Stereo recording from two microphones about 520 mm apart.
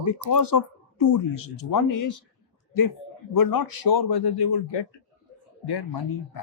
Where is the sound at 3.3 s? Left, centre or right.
Left.